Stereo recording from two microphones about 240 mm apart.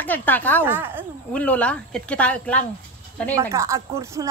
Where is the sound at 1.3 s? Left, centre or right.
Centre.